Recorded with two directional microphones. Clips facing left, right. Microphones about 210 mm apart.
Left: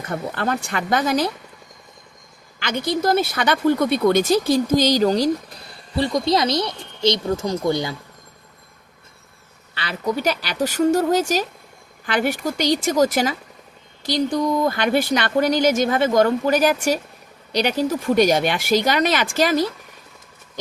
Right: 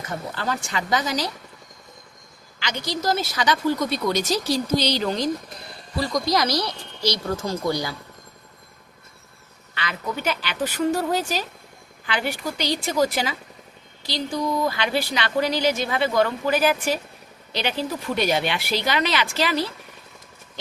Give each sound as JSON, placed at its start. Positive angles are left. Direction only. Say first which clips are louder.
{"t": 0.1, "sound": "speech", "louder": "left 5 dB", "side_deg": 60}
{"t": 2.6, "sound": "speech", "louder": "left 6 dB", "side_deg": 55}
{"t": 6.0, "sound": "speech", "louder": "left 4 dB", "side_deg": 30}
{"t": 9.7, "sound": "a woman's voice", "louder": "left 6 dB", "side_deg": 35}